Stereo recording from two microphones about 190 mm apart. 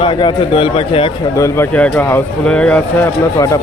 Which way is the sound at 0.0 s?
25° left (ahead or behind).